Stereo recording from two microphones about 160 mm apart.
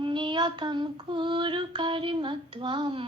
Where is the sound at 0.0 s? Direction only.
30° right (ahead or behind).